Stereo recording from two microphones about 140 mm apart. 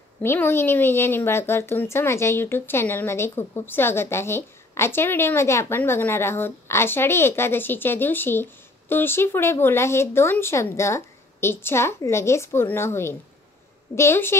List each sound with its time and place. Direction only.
0.2 s a woman's voice: 15° left (ahead or behind)